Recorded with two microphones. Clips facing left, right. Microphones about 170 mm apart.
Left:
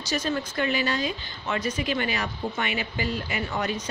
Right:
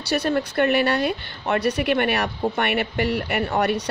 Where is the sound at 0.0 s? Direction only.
65° right (ahead or behind).